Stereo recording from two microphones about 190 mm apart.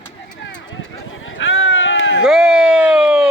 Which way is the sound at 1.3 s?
90° left.